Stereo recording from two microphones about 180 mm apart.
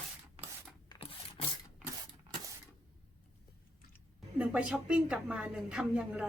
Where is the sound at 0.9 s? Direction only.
30° left (ahead or behind).